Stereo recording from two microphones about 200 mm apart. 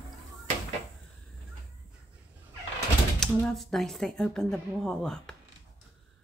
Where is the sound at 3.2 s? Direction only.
Centre (ahead or behind).